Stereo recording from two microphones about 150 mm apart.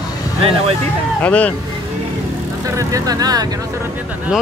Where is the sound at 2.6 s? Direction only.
20° right (ahead or behind).